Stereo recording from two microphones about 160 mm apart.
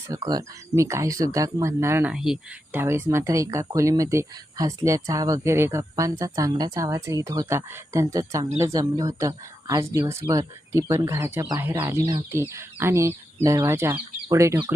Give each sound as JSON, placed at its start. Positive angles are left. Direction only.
{"t": 0.1, "sound": "speech", "side_deg": -20}
{"t": 2.1, "sound": "speech", "side_deg": -5}
{"t": 2.8, "sound": "speech", "side_deg": -15}